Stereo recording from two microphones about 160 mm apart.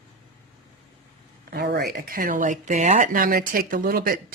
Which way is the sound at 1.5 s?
80° right.